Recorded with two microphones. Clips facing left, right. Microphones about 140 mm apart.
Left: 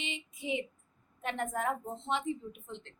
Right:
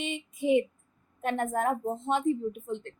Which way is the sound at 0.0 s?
50° right (ahead or behind).